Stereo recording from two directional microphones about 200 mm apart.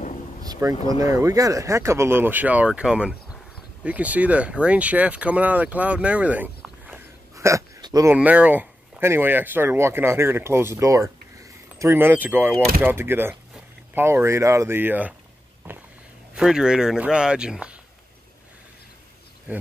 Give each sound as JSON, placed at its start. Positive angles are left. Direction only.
{"t": 0.5, "sound": "speech", "side_deg": -15}
{"t": 16.3, "sound": "a man's voice", "side_deg": -5}